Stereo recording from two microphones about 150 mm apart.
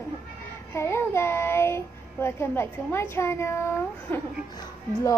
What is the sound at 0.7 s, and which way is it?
A child's voice, 15° left (ahead or behind).